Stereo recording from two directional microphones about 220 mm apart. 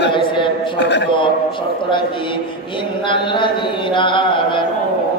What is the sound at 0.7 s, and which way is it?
Speech, 50° left (ahead or behind).